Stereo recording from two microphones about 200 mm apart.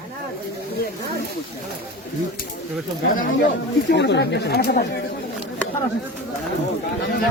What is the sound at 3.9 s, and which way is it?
Speech, 60° left (ahead or behind).